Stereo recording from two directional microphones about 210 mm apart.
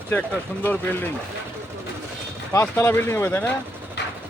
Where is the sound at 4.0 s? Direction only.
55° left (ahead or behind).